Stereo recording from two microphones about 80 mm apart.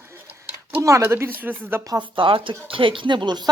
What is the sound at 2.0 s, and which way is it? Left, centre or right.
Speech, right.